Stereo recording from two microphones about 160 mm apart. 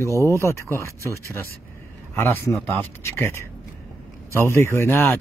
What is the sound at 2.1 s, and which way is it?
A man's voice, 15° left (ahead or behind).